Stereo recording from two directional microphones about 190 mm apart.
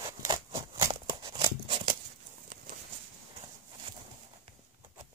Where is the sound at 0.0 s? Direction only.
15° right (ahead or behind).